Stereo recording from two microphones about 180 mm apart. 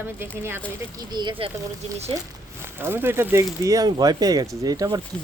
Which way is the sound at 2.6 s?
15° right (ahead or behind).